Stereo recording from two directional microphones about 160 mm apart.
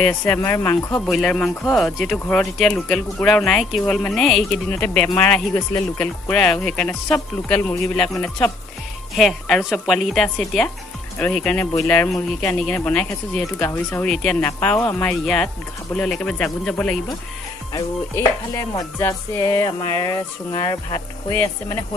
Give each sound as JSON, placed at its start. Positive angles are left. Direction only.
{"t": 0.3, "sound": "speech", "side_deg": 15}
{"t": 1.0, "sound": "speech", "side_deg": 5}
{"t": 9.1, "sound": "speech", "side_deg": 0}
{"t": 14.4, "sound": "speech", "side_deg": 15}
{"t": 17.7, "sound": "music", "side_deg": 20}